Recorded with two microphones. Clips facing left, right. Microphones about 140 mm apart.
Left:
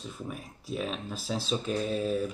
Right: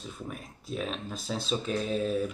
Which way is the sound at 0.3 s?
5° left (ahead or behind).